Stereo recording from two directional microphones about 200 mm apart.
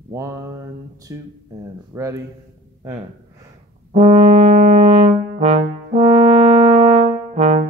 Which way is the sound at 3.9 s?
30° right (ahead or behind).